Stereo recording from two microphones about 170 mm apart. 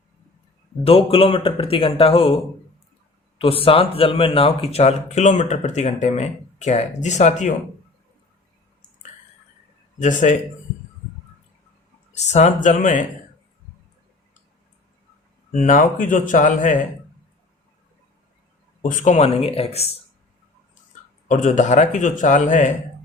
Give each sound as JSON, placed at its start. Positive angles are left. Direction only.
{"t": 0.9, "sound": "speech", "side_deg": 35}
{"t": 10.0, "sound": "a man's voice", "side_deg": 50}
{"t": 12.1, "sound": "a man's voice", "side_deg": 40}
{"t": 15.5, "sound": "a man's voice", "side_deg": 50}
{"t": 18.8, "sound": "speech", "side_deg": 50}
{"t": 21.2, "sound": "a man's voice", "side_deg": 45}